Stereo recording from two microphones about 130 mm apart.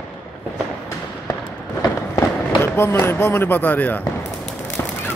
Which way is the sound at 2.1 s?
20° left (ahead or behind).